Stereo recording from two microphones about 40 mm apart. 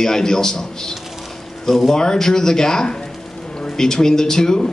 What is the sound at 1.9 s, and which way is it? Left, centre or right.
A man's voice, centre.